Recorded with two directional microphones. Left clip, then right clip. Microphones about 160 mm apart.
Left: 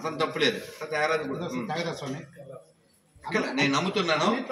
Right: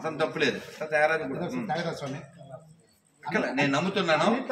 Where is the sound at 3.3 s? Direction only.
15° right (ahead or behind).